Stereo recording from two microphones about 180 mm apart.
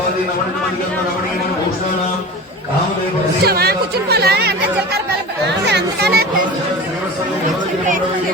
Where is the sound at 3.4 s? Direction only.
60° right (ahead or behind).